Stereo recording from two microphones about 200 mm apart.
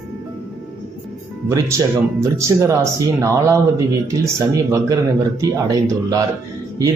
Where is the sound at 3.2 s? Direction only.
15° right (ahead or behind).